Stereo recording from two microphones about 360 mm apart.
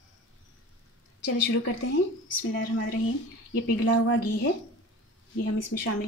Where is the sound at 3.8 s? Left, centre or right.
Left.